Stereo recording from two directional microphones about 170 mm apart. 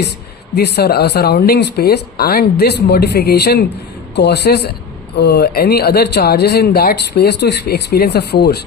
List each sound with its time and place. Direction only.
0.5 s speech: 70° left (ahead or behind)
4.1 s speech: 80° left